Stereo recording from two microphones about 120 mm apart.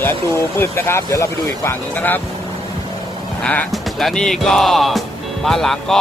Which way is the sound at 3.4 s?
10° left (ahead or behind).